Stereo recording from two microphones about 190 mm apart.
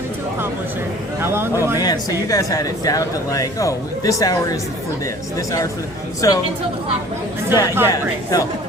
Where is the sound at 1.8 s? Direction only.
20° left (ahead or behind).